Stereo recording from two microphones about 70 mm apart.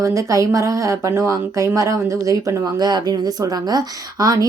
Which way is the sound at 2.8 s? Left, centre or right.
Right.